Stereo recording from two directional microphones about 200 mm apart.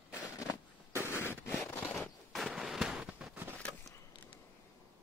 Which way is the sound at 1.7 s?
5° left (ahead or behind).